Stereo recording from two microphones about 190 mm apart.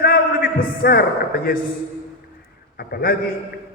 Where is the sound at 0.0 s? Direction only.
55° left (ahead or behind).